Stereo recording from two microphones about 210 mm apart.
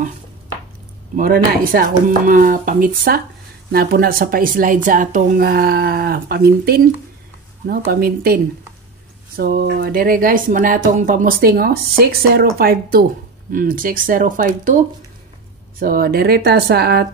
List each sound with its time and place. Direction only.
1.1 s speech: 40° right (ahead or behind)
7.8 s speech: 45° right (ahead or behind)
9.4 s speech: 45° right (ahead or behind)
15.8 s speech: 45° right (ahead or behind)